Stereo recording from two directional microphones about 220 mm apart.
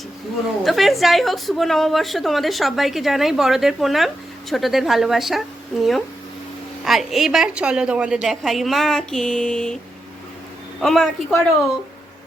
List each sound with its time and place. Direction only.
0.6 s a woman's voice: centre (ahead or behind)
6.8 s a woman's voice: centre (ahead or behind)
10.8 s a woman's voice: centre (ahead or behind)